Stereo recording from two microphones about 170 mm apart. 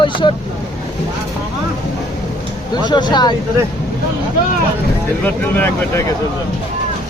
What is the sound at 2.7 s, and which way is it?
Speech, 25° left (ahead or behind).